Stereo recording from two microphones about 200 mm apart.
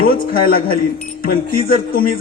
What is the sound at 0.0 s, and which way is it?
A man's voice, 45° left (ahead or behind).